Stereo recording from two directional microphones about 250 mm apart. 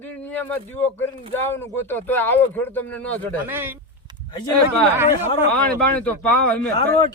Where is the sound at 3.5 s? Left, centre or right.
Centre.